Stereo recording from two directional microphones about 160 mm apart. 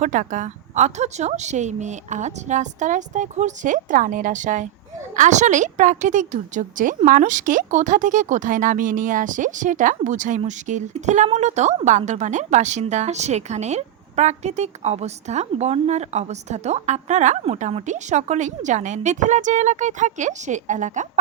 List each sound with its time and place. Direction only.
0.0 s a woman's voice: 55° right (ahead or behind)